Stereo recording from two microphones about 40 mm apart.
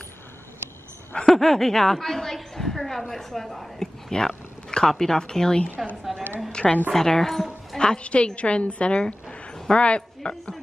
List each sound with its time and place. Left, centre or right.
1.2 s a woman's voice: centre
3.8 s whispering: centre
4.6 s a sound: left
4.9 s a woman's voice: centre
6.1 s a sound: centre
6.5 s a woman's voice: left
6.9 s a woman's voice: centre
7.8 s a woman's voice: left
9.0 s a sound: centre